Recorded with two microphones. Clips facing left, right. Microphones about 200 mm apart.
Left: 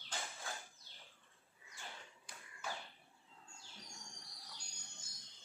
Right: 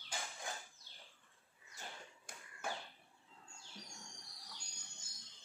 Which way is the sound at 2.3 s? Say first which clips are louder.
Right 1 dB; 50° right (ahead or behind).